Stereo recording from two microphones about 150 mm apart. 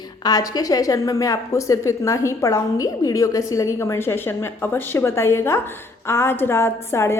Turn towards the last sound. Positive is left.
turn(degrees=15)  # may be behind; listen again after turning